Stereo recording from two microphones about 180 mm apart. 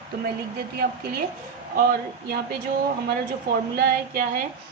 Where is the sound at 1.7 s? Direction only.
55° right (ahead or behind).